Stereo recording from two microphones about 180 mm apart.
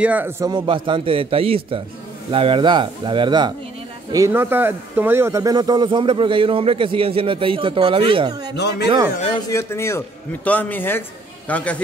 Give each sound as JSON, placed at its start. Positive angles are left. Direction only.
{"t": 0.0, "sound": "speech", "side_deg": -10}
{"t": 0.5, "sound": "speech", "side_deg": -25}
{"t": 8.5, "sound": "speech", "side_deg": 70}
{"t": 9.5, "sound": "a man's voice", "side_deg": 15}